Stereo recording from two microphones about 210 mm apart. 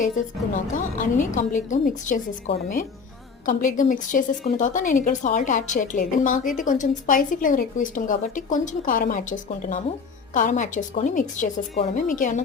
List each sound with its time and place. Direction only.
1.2 s a woman's voice: 35° left (ahead or behind)